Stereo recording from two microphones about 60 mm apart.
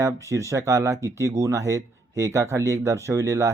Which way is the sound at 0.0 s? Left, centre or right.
Right.